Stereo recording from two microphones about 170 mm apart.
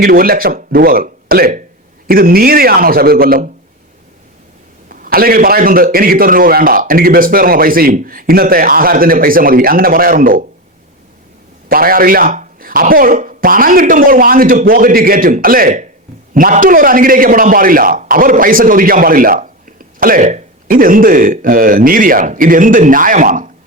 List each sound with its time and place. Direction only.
0.0 s a man's voice: 60° right (ahead or behind)
4.9 s a man's voice: 60° right (ahead or behind)
11.7 s a man's voice: 60° right (ahead or behind)